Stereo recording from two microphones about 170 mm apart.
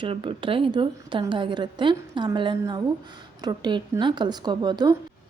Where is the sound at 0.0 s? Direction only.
30° right (ahead or behind).